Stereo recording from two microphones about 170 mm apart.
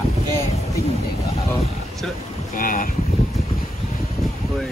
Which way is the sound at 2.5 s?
55° left (ahead or behind).